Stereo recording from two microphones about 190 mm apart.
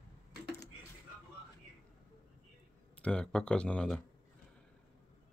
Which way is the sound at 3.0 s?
5° left (ahead or behind).